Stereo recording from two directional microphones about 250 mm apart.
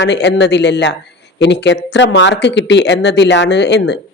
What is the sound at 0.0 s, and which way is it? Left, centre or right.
Speech, left.